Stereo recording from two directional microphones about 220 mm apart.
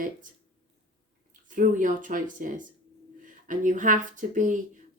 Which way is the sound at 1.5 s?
35° right (ahead or behind).